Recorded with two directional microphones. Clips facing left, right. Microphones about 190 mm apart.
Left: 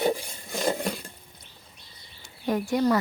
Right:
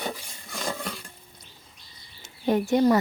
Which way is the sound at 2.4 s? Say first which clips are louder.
Right 3 dB; 25° right (ahead or behind).